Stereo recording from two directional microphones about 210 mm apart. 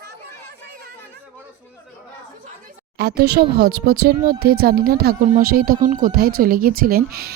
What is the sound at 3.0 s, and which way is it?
A woman's voice, 50° right (ahead or behind).